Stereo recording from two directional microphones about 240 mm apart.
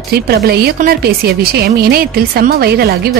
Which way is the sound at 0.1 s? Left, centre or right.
Right.